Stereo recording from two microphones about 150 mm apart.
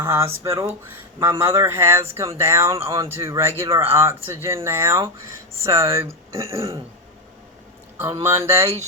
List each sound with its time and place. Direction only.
0.0 s speech: 15° right (ahead or behind)
8.2 s speech: 20° right (ahead or behind)